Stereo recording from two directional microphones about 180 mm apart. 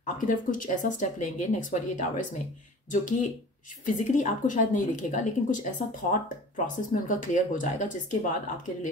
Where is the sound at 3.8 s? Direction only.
45° left (ahead or behind).